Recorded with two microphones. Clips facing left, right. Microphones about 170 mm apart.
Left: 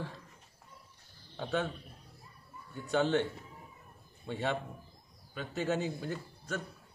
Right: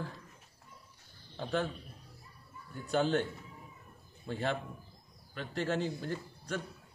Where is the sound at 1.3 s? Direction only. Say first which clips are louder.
Even; centre (ahead or behind).